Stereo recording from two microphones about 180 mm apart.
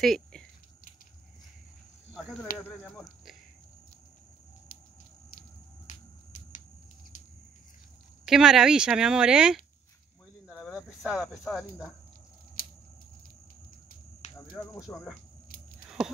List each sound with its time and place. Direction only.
0.0 s a sound: 5° left (ahead or behind)
2.5 s speech: 5° left (ahead or behind)
5.9 s music: 40° left (ahead or behind)
8.3 s speech: 5° right (ahead or behind)
10.8 s speech: centre (ahead or behind)
14.2 s a sound: 40° left (ahead or behind)
14.8 s speech: centre (ahead or behind)